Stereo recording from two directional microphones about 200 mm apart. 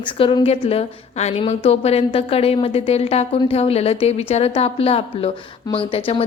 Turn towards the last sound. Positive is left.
turn(degrees=30)  # may be behind; listen again after turning